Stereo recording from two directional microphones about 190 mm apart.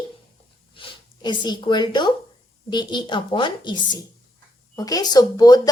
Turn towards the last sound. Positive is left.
turn(degrees=20)  # may be behind; listen again after turning